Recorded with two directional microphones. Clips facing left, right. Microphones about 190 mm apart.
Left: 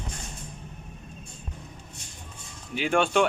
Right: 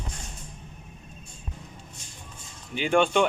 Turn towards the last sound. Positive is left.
turn(degrees=0)  # may be behind; listen again after turning